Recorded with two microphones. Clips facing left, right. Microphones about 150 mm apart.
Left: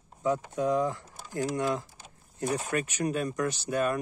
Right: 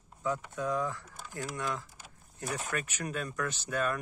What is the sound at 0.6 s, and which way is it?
Speech, 30° left (ahead or behind).